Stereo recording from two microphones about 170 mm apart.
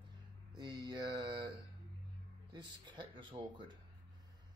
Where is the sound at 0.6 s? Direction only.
25° right (ahead or behind).